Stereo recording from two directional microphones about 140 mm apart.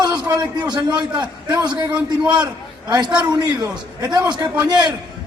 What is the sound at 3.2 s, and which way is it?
A man's voice, 30° right (ahead or behind).